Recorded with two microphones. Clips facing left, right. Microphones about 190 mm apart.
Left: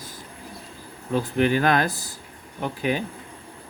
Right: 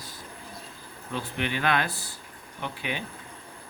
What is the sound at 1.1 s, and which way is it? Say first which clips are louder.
Speech: left 10 dB; 40° left (ahead or behind).